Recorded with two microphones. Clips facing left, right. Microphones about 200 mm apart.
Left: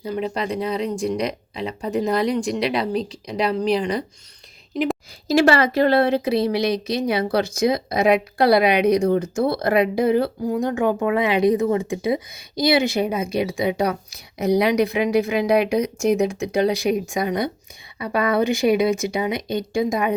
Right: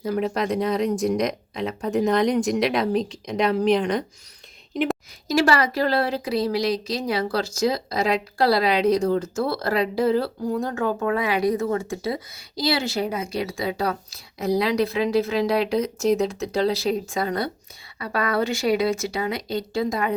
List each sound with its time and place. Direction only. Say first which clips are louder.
0.0 s speech: right 1 dB; centre (ahead or behind)
5.3 s speech: left 4 dB; 25° left (ahead or behind)